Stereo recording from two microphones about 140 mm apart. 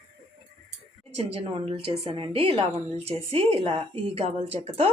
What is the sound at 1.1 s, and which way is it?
A woman's voice, 45° right (ahead or behind).